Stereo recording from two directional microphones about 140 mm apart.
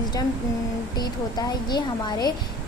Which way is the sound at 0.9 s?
30° left (ahead or behind).